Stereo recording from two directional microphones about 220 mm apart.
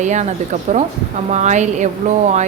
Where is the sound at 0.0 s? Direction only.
35° right (ahead or behind).